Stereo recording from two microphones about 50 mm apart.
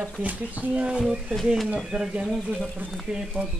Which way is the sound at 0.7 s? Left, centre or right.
Centre.